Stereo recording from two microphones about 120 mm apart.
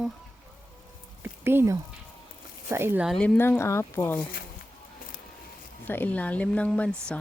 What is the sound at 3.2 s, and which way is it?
Speech, 15° left (ahead or behind).